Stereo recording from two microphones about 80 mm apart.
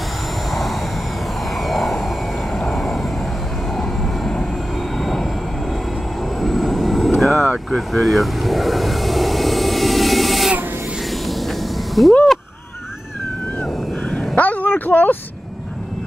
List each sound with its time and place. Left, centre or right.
0.5 s vehicle: centre
6.4 s vehicle: centre
14.3 s a sound: left